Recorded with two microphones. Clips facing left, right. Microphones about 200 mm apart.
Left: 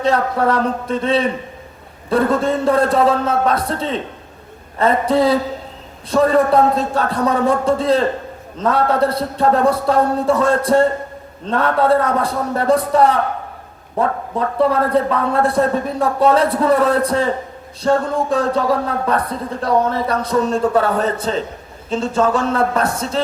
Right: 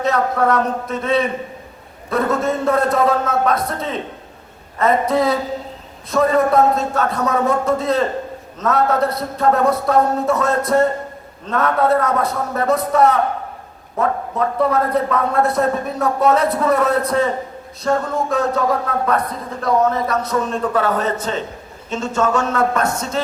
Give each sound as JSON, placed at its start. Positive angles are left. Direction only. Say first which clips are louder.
{"t": 0.0, "sound": "a man's voice", "louder": "left 1 dB", "side_deg": 30}
{"t": 14.3, "sound": "speech", "louder": "left 2 dB", "side_deg": 30}